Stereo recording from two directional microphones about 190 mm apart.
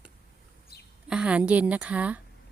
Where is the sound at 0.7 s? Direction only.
55° left (ahead or behind).